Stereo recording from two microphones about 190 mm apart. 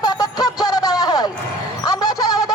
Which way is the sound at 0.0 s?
20° left (ahead or behind).